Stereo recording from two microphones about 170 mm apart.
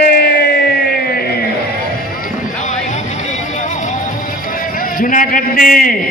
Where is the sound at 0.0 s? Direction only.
65° left (ahead or behind).